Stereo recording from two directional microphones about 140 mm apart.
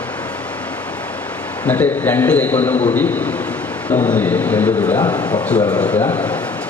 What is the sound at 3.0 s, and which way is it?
A man's voice, 10° left (ahead or behind).